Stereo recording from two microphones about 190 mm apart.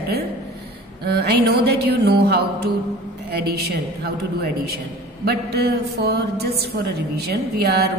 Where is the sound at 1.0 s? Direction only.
55° right (ahead or behind).